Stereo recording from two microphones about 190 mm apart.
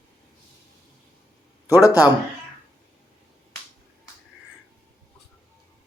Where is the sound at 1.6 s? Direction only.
15° left (ahead or behind).